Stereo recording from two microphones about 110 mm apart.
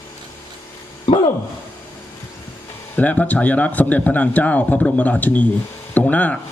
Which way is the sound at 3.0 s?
15° left (ahead or behind).